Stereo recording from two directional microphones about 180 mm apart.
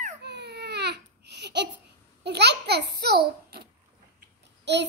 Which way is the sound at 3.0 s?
65° right (ahead or behind).